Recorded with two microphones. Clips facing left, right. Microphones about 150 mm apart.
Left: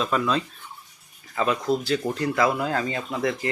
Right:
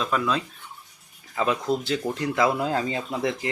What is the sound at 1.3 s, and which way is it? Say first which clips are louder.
Speech: left 1 dB; 15° right (ahead or behind).